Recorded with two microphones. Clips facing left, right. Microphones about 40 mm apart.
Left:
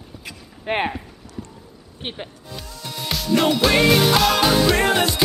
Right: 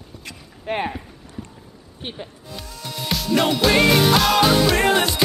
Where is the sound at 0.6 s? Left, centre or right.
Left.